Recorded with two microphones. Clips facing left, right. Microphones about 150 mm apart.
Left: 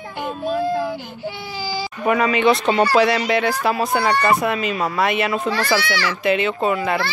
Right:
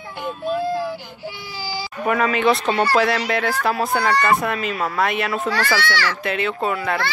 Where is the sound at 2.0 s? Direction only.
5° left (ahead or behind).